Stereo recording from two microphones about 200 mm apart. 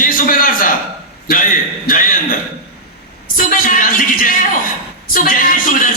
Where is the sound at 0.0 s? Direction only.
45° left (ahead or behind).